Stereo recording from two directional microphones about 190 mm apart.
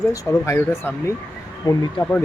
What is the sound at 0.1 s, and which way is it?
Speech, 15° left (ahead or behind).